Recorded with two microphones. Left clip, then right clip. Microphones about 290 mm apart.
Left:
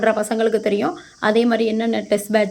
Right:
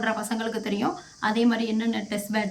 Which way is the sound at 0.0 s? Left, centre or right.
Centre.